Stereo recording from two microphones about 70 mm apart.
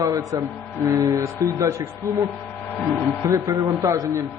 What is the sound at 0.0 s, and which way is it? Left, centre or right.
Speech, right.